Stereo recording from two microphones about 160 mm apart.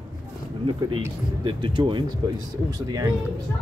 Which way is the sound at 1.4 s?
30° right (ahead or behind).